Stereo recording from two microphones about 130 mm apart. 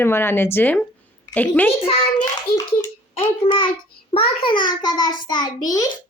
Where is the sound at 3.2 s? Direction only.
45° left (ahead or behind).